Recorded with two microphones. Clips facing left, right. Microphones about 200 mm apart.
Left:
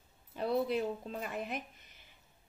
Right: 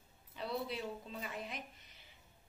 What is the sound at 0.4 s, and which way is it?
A woman's voice, 50° left (ahead or behind).